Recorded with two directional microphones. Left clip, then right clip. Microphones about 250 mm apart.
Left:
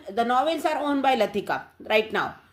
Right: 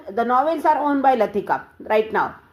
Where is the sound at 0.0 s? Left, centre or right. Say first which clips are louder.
Right 4 dB; left.